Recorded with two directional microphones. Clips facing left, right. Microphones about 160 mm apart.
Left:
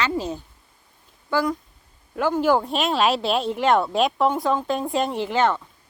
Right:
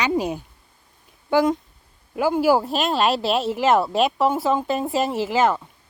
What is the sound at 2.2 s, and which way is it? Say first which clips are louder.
Speech: right 2 dB; 10° right (ahead or behind).